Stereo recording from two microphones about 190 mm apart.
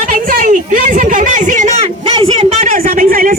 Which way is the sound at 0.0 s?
45° right (ahead or behind).